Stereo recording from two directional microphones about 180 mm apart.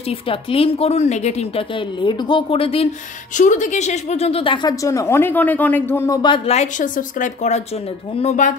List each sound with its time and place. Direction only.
0.1 s a woman's voice: 30° left (ahead or behind)
3.3 s a woman's voice: 45° left (ahead or behind)